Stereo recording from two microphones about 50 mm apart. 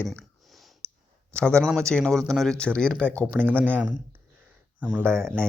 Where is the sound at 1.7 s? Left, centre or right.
Centre.